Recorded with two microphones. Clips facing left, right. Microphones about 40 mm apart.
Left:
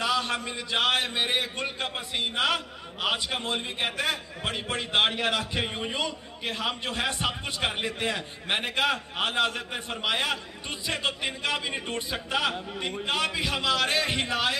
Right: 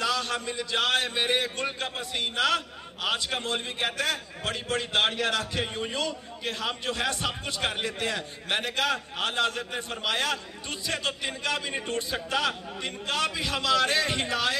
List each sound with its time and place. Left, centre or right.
0.0 s a man's voice: left